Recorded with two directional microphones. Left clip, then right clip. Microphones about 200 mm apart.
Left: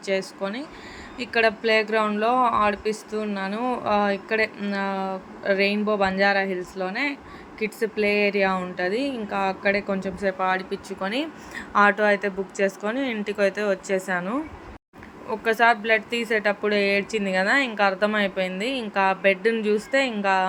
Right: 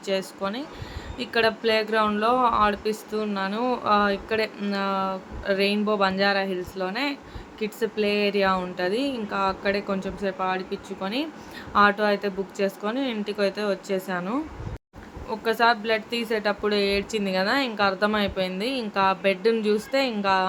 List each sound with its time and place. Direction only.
0.0 s speech: 5° left (ahead or behind)
10.2 s speech: 20° left (ahead or behind)
10.5 s speech: 35° left (ahead or behind); by 20.5 s 5° left (ahead or behind)